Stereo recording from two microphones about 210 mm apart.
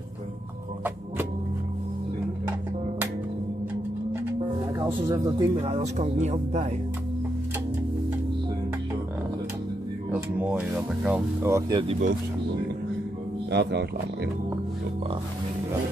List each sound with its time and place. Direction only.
4.1 s music: 10° right (ahead or behind)
5.5 s speech: 30° right (ahead or behind)
10.1 s speech: 5° right (ahead or behind)
11.9 s speech: 35° right (ahead or behind)
13.5 s speech: 55° right (ahead or behind)